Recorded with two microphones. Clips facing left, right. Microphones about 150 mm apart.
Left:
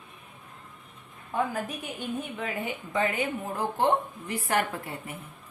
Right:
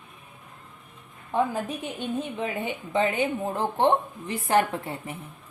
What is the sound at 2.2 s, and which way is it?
A woman's voice, 25° right (ahead or behind).